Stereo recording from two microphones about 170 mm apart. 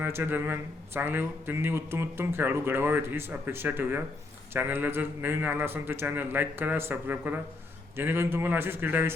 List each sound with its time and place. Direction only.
0.0 s speech: 10° right (ahead or behind)